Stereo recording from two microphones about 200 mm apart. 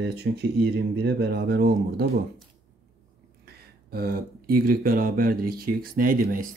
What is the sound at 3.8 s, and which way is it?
Speech, 50° right (ahead or behind).